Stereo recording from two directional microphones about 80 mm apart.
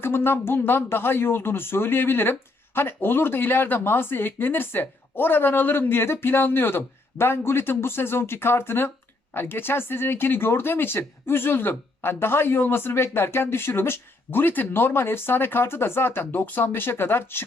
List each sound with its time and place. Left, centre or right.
0.0 s speech: left